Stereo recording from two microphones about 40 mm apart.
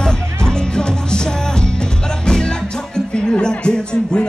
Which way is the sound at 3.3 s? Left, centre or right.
Left.